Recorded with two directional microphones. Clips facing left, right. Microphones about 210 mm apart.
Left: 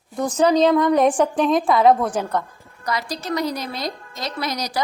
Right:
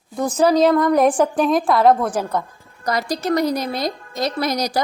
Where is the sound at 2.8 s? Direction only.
40° right (ahead or behind).